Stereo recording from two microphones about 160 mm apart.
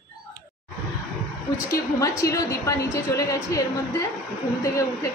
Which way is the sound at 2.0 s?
20° left (ahead or behind).